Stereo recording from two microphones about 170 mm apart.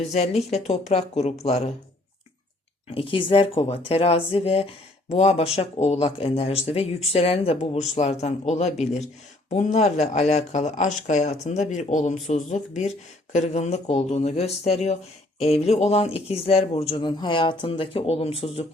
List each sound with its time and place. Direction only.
0.0 s speech: 40° left (ahead or behind)
2.9 s speech: 30° left (ahead or behind)